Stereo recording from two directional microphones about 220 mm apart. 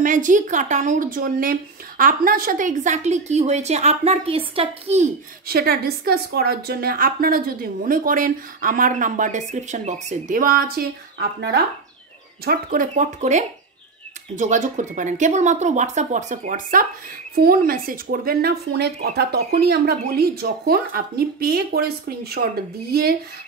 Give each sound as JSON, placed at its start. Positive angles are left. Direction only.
{"t": 0.0, "sound": "a woman's voice", "side_deg": -35}
{"t": 5.5, "sound": "a woman's voice", "side_deg": -45}